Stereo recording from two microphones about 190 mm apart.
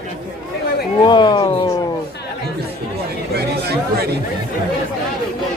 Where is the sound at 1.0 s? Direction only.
25° left (ahead or behind).